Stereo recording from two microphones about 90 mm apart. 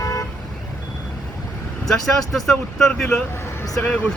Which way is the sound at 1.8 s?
5° left (ahead or behind).